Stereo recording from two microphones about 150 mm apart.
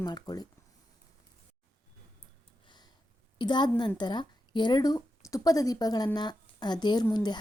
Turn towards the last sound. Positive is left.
turn(degrees=25)  # may be behind; listen again after turning